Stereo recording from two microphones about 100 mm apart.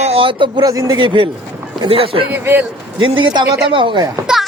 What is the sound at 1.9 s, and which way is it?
Speech, 70° right (ahead or behind).